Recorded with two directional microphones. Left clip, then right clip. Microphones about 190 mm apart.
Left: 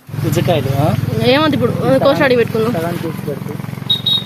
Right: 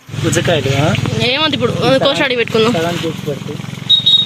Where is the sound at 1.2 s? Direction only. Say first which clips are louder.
Left 2 dB; 10° left (ahead or behind); by 2.7 s 5° right (ahead or behind).